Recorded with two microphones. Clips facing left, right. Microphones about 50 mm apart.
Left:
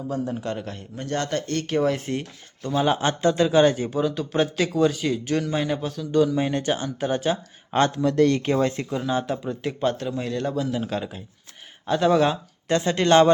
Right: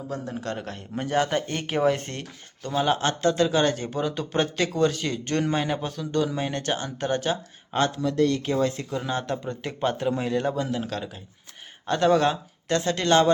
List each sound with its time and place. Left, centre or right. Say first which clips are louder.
0.1 s speech: left 4 dB; centre
0.5 s speech: left 2 dB; centre
0.9 s speech: right 3 dB; centre
1.8 s speech: even; centre
3.0 s speech: left 2 dB; centre
7.9 s speech: left 3 dB; left
9.0 s speech: left 3 dB; centre
10.2 s speech: right 1 dB; centre
10.6 s speech: left 2 dB; centre
12.6 s speech: left 3 dB; centre